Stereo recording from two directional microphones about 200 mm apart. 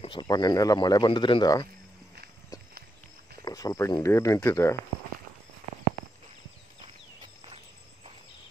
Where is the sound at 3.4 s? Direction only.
20° left (ahead or behind).